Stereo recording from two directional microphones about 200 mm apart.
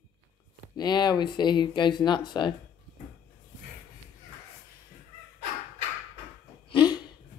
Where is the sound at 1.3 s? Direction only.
20° left (ahead or behind).